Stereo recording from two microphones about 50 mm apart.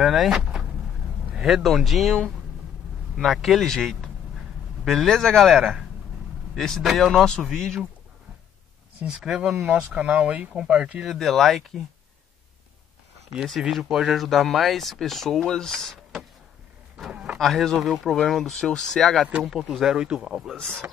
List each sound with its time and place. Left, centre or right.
0.0 s speech: centre
3.4 s speech: centre
9.0 s speech: centre
9.7 s speech: right
10.5 s speech: centre
11.1 s speech: centre
13.6 s speech: centre
17.1 s a sound: centre
17.4 s speech: centre
19.4 s speech: centre